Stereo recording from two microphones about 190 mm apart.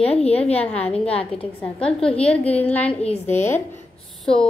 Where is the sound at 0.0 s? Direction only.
35° left (ahead or behind).